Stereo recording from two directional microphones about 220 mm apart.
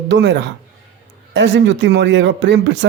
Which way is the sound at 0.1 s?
50° right (ahead or behind).